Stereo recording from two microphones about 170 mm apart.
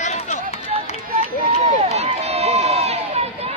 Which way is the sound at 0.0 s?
45° left (ahead or behind).